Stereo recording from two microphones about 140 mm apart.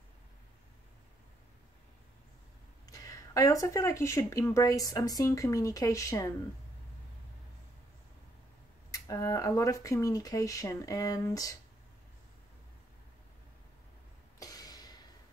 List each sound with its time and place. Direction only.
2.9 s speech: 25° left (ahead or behind)
8.9 s speech: 25° left (ahead or behind)
14.4 s a sound: 25° left (ahead or behind)